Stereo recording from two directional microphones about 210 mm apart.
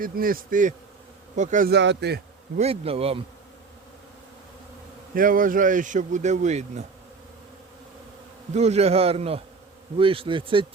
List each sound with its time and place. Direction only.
0.0 s a man's voice: 45° right (ahead or behind)
1.7 s a man's voice: 55° right (ahead or behind)
2.6 s a man's voice: 30° right (ahead or behind)
5.1 s speech: 40° right (ahead or behind)
8.5 s a man's voice: 30° right (ahead or behind)